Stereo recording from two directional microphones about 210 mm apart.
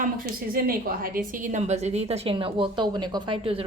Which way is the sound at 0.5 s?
45° right (ahead or behind).